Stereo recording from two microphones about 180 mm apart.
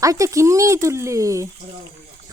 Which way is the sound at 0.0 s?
15° right (ahead or behind).